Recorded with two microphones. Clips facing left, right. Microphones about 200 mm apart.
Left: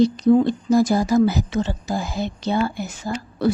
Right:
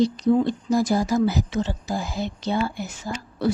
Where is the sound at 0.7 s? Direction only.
60° left (ahead or behind).